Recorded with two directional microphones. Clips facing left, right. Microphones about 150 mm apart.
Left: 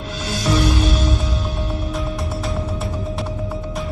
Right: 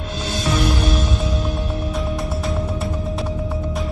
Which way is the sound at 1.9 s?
Centre (ahead or behind).